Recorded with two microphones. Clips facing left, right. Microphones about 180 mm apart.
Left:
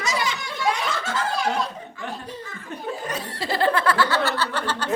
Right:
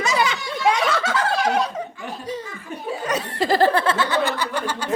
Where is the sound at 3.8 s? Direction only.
20° right (ahead or behind).